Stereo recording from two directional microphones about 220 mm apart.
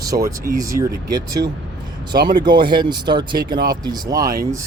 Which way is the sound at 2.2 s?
20° right (ahead or behind).